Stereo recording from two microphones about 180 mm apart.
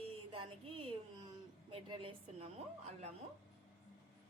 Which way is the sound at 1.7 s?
30° right (ahead or behind).